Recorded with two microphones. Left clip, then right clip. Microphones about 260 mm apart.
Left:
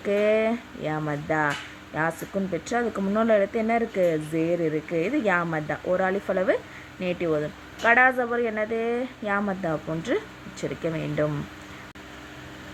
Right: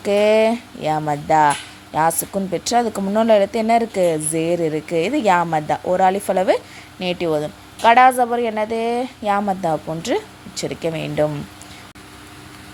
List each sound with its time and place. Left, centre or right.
0.0 s speech: right